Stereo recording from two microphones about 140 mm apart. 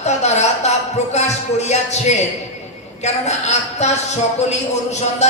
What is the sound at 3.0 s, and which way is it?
A woman's voice, 55° left (ahead or behind).